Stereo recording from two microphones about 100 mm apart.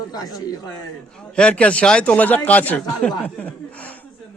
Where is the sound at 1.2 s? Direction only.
10° left (ahead or behind).